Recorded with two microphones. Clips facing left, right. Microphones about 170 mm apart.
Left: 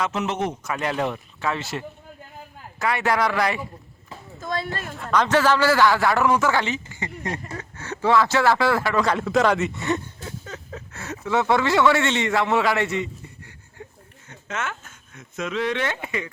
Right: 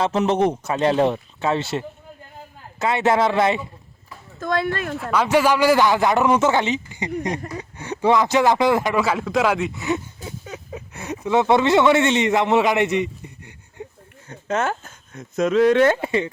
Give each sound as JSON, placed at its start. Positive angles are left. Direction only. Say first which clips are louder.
{"t": 0.0, "sound": "a man's voice", "louder": "right 6 dB", "side_deg": -30}
{"t": 4.4, "sound": "speech", "louder": "right 6 dB", "side_deg": -55}
{"t": 5.1, "sound": "a man's voice", "louder": "right 1 dB", "side_deg": -10}
{"t": 9.0, "sound": "speech", "louder": "even", "side_deg": -5}
{"t": 14.3, "sound": "speech", "louder": "right 8 dB", "side_deg": -35}